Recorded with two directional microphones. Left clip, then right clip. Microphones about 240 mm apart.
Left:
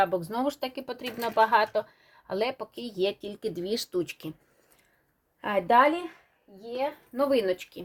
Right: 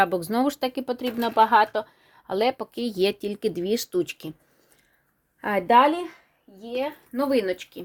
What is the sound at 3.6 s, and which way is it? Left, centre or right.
Speech, right.